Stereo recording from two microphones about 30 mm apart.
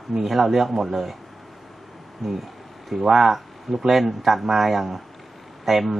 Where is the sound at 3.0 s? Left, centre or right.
Centre.